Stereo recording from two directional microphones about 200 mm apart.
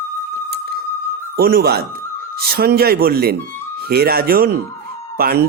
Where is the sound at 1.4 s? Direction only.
50° right (ahead or behind).